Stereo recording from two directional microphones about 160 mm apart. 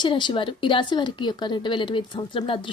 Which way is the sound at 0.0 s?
30° left (ahead or behind).